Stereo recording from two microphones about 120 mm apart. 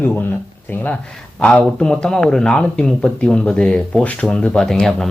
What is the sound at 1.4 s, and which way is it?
Speech, 10° left (ahead or behind).